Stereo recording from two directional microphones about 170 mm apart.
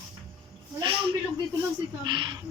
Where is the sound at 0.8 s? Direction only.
30° right (ahead or behind).